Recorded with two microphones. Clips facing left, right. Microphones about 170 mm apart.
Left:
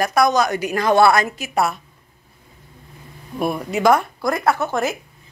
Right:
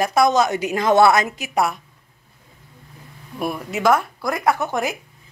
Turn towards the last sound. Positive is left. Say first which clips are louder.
# left 1 dB
turn(degrees=-15)  # may be behind; listen again after turning